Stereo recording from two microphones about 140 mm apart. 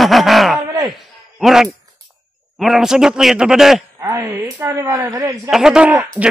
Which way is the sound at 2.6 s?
5° right (ahead or behind).